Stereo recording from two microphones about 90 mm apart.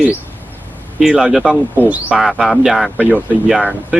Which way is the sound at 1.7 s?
20° right (ahead or behind).